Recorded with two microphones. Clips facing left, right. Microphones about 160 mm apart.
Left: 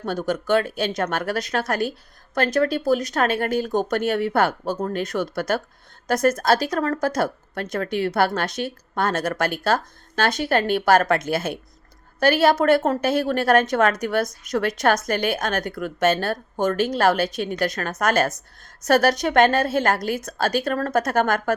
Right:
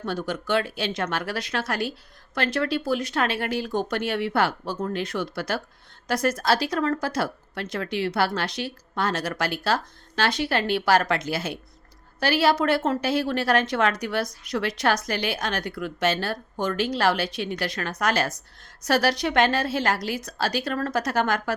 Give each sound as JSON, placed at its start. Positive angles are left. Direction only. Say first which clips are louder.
{"t": 0.0, "sound": "speech", "louder": "left 4 dB", "side_deg": 45}